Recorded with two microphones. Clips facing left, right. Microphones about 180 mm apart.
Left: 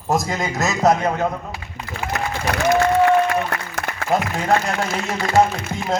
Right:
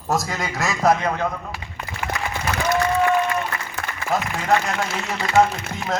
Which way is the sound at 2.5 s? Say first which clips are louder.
Left 4 dB; 60° left (ahead or behind).